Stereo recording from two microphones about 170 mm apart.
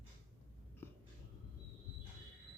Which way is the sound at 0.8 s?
10° left (ahead or behind).